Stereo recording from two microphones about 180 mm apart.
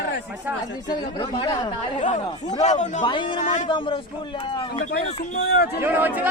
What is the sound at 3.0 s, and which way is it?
Speech, 25° left (ahead or behind).